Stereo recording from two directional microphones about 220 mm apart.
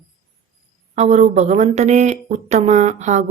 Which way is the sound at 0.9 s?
30° right (ahead or behind).